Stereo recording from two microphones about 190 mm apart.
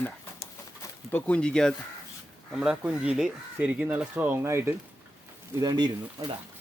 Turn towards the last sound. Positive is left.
turn(degrees=-20)  # may be behind; listen again after turning